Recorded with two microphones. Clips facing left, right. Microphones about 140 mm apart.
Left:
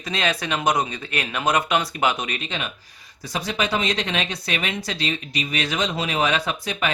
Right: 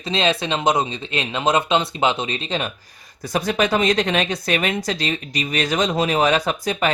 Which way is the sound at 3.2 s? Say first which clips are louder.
Right 5 dB; 50° right (ahead or behind).